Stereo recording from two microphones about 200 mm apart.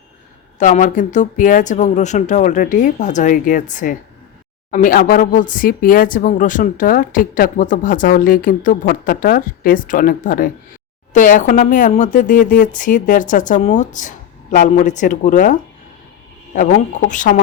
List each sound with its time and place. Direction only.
0.6 s speech: 40° left (ahead or behind)
16.6 s speech: 40° left (ahead or behind)